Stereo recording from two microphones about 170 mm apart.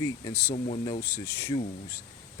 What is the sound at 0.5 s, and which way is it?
Speech, 45° left (ahead or behind).